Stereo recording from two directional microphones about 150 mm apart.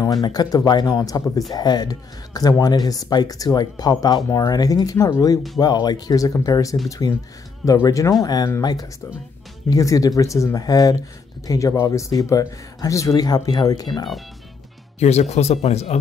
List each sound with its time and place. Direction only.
0.0 s speech: 25° left (ahead or behind)
9.7 s speech: 20° left (ahead or behind)
15.0 s speech: 45° left (ahead or behind)